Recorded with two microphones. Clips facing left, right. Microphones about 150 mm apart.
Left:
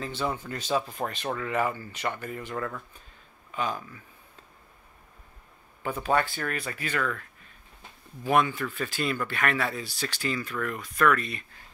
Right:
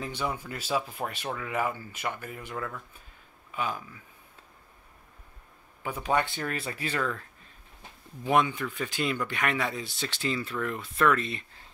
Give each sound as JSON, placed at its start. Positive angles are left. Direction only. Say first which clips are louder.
{"t": 0.0, "sound": "speech", "louder": "left 2 dB", "side_deg": -15}
{"t": 5.8, "sound": "speech", "louder": "left 2 dB", "side_deg": -10}
{"t": 8.2, "sound": "speech", "louder": "left 1 dB", "side_deg": -20}